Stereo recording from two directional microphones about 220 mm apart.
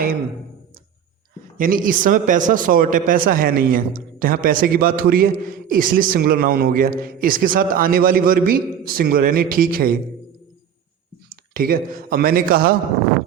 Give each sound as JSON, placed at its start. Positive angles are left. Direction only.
{"t": 1.5, "sound": "a man's voice", "side_deg": -40}
{"t": 11.5, "sound": "a man's voice", "side_deg": -40}